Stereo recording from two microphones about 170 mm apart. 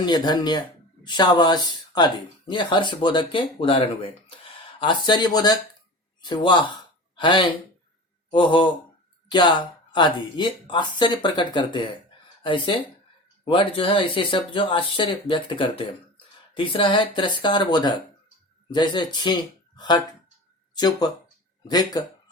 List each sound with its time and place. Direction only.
0.0 s speech: 25° left (ahead or behind)